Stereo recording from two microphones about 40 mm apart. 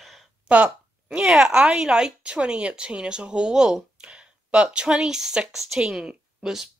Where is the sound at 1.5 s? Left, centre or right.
Right.